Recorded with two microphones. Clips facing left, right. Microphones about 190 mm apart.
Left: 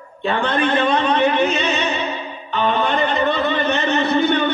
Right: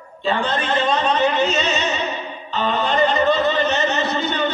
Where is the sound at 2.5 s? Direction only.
60° left (ahead or behind).